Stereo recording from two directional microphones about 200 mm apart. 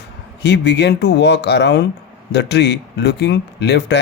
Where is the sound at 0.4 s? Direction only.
60° left (ahead or behind).